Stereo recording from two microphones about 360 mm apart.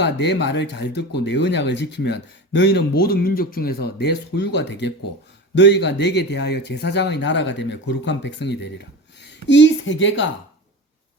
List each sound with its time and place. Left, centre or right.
0.0 s speech: left
9.2 s a sound: left
10.0 s speech: left